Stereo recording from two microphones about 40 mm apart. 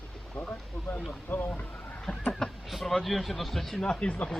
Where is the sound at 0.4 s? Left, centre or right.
Left.